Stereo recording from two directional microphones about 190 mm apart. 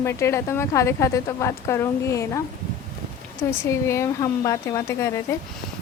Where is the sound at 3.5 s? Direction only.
15° left (ahead or behind).